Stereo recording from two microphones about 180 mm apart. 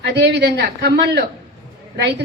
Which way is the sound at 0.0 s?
70° right (ahead or behind).